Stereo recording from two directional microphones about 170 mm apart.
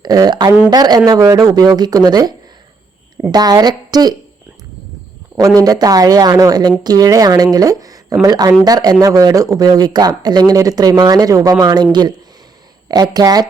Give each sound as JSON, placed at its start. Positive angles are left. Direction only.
{"t": 0.0, "sound": "speech", "side_deg": -20}
{"t": 3.3, "sound": "speech", "side_deg": -25}
{"t": 5.5, "sound": "speech", "side_deg": -20}